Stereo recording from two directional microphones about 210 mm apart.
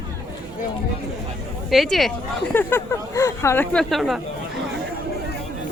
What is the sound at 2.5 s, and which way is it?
Speech, 10° left (ahead or behind).